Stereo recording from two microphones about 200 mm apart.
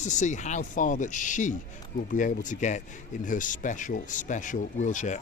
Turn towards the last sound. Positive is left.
turn(degrees=40)  # may be behind; listen again after turning